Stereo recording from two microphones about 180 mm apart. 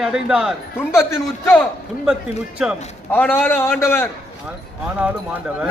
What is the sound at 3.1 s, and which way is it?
A man's voice, 10° left (ahead or behind).